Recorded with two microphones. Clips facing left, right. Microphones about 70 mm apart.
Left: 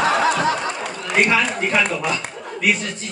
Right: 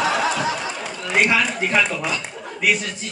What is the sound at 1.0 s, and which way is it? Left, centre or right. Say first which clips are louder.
Speech: left 1 dB; centre.